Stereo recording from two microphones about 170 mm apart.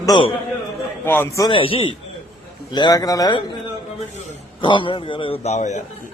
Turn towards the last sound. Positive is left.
turn(degrees=45)  # may be behind; listen again after turning